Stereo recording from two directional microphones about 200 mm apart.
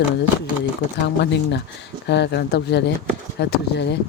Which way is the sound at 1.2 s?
60° left (ahead or behind).